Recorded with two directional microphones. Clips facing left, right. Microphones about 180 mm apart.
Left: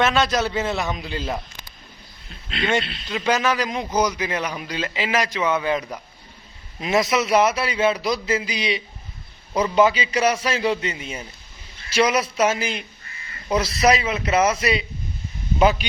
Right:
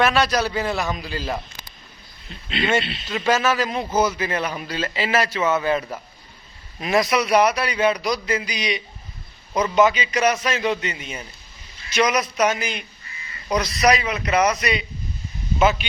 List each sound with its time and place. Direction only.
0.0 s a man's voice: 20° left (ahead or behind)
2.5 s a man's voice: centre (ahead or behind)
3.2 s a man's voice: 15° left (ahead or behind); by 15.9 s 35° left (ahead or behind)